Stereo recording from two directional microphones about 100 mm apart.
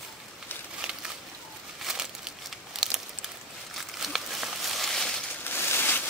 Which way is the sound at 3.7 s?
Centre (ahead or behind).